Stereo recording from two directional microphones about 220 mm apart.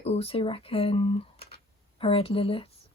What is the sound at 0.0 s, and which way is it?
Speech, 25° left (ahead or behind).